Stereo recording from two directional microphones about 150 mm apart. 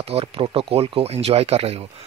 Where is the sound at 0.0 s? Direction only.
40° right (ahead or behind).